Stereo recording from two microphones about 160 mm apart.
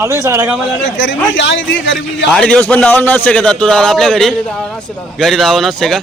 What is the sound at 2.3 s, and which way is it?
A man's voice, 5° left (ahead or behind).